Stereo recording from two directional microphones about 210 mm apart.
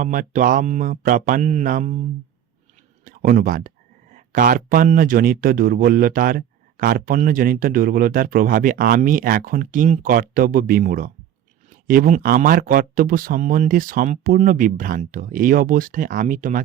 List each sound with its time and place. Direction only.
0.0 s speech: 40° right (ahead or behind)